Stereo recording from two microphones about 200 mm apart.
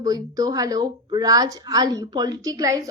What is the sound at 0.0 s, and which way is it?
A woman's voice, 20° right (ahead or behind).